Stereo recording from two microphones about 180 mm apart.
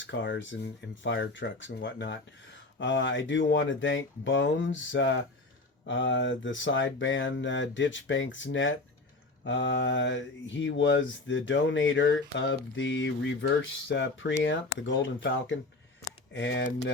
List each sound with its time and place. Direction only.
0.0 s speech: 90° left
16.3 s speech: 80° left